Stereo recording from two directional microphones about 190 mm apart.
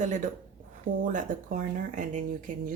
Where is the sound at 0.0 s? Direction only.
40° right (ahead or behind).